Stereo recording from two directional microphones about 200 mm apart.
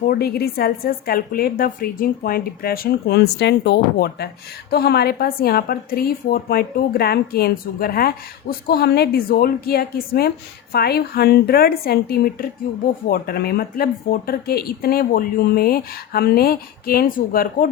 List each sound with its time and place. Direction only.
0.1 s a woman's voice: 50° left (ahead or behind)